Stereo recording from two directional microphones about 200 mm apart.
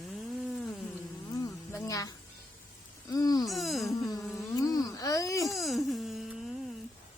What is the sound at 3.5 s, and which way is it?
Speech, centre (ahead or behind).